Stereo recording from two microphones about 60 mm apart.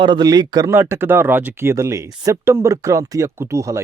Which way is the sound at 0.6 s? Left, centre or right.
Right.